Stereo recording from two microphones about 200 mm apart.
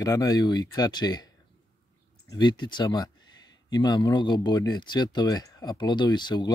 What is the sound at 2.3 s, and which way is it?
Speech, 20° left (ahead or behind).